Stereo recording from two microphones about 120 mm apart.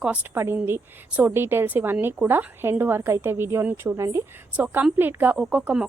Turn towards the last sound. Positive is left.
turn(degrees=-10)  # may be behind; listen again after turning